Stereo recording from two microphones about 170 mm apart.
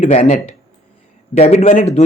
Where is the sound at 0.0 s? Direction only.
45° left (ahead or behind).